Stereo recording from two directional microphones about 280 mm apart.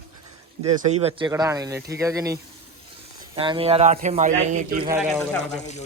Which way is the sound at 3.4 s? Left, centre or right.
Centre.